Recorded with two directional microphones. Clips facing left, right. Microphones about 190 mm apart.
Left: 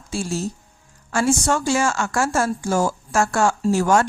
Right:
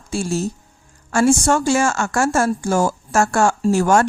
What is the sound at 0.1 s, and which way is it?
Speech, 50° right (ahead or behind).